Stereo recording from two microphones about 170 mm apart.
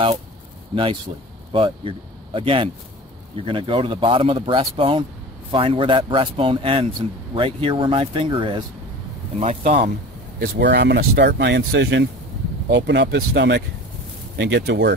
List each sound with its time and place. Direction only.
1.5 s speech: 30° right (ahead or behind)
10.4 s speech: 85° right